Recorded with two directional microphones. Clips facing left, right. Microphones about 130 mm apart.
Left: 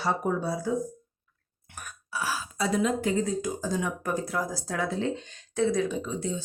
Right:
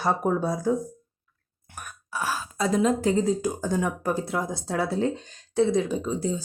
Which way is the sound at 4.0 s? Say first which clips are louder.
Right 2 dB; 30° right (ahead or behind).